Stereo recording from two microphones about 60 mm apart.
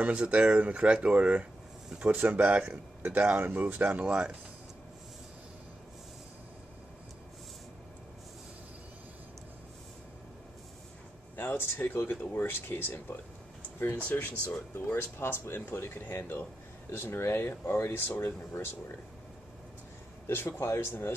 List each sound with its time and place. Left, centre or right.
0.0 s speech: right
4.0 s speech: centre
11.3 s speech: left
13.9 s speech: left
15.0 s speech: left
20.2 s speech: left